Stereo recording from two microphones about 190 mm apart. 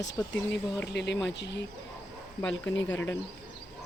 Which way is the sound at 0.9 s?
65° left (ahead or behind).